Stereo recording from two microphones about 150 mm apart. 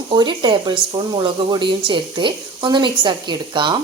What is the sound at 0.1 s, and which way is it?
Speech, 30° right (ahead or behind).